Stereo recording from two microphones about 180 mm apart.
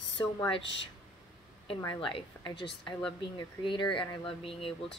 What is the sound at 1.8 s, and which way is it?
Speech, 25° left (ahead or behind).